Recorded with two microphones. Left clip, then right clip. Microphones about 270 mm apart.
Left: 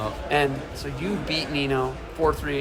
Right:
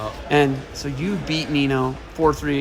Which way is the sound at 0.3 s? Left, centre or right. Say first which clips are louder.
Right 5 dB; right.